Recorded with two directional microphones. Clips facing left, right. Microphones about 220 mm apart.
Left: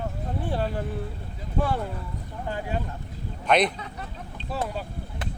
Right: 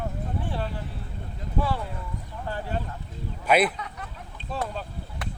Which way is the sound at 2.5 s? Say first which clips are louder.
Left 1 dB; 15° left (ahead or behind).